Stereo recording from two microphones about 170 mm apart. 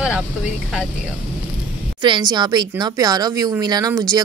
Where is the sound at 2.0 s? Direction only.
25° right (ahead or behind).